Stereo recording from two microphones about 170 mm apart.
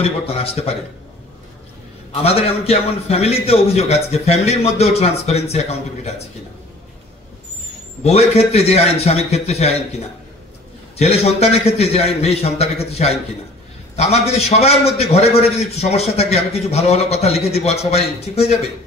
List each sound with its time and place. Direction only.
0.0 s a man's voice: 35° left (ahead or behind)
2.2 s a man's voice: 35° left (ahead or behind)
8.0 s a man's voice: 40° left (ahead or behind)